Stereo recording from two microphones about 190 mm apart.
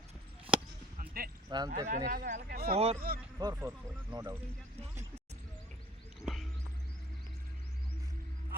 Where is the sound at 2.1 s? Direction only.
45° right (ahead or behind).